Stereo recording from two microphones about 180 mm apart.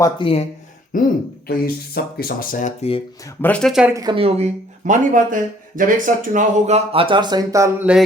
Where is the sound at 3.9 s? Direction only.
25° right (ahead or behind).